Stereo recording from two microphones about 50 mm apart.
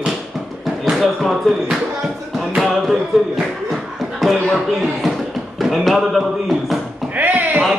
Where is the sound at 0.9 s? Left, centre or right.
Centre.